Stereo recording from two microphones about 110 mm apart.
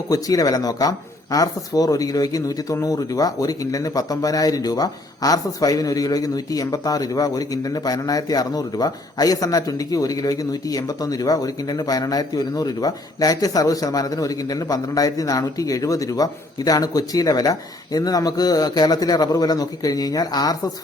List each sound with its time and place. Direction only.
0.1 s speech: 35° left (ahead or behind)